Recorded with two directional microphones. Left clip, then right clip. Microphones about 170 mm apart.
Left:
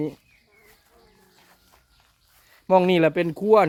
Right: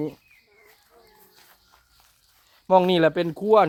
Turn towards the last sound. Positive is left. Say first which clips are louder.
# even
turn(degrees=15)  # may be behind; listen again after turning